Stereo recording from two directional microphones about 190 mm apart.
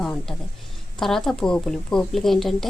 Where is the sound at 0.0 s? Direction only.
5° left (ahead or behind).